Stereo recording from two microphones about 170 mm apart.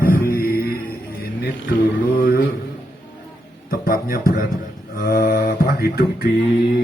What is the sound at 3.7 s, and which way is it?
Music, 60° left (ahead or behind).